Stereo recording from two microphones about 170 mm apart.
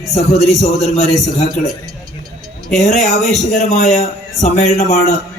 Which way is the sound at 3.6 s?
45° left (ahead or behind).